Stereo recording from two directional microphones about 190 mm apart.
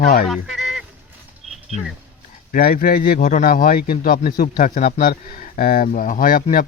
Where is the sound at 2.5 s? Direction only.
50° left (ahead or behind).